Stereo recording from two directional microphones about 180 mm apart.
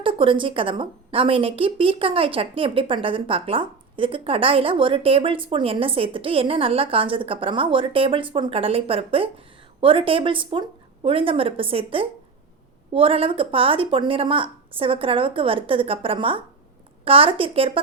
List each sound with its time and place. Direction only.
0.0 s a woman's voice: 30° right (ahead or behind)